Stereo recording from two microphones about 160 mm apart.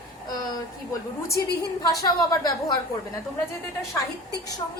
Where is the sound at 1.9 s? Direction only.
25° left (ahead or behind).